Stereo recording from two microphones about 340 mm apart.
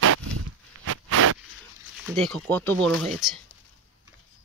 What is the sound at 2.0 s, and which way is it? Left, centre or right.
Speech, centre.